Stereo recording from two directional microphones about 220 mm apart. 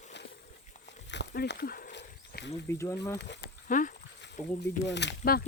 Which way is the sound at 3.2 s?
50° left (ahead or behind).